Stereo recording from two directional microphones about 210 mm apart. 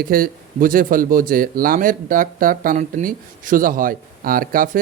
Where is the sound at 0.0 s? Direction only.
40° right (ahead or behind).